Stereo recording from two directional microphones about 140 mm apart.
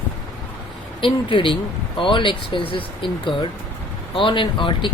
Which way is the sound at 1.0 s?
35° left (ahead or behind).